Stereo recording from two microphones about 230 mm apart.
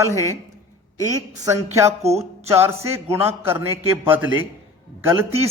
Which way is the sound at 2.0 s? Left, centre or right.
Right.